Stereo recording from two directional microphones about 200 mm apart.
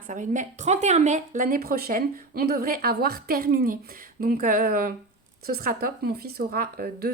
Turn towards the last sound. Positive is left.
turn(degrees=-50)  # may be behind; listen again after turning